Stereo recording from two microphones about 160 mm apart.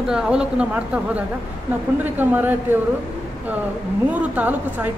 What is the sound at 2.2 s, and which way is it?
Speech, 10° right (ahead or behind).